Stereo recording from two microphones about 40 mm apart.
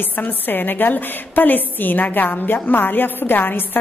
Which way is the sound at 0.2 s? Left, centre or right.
Left.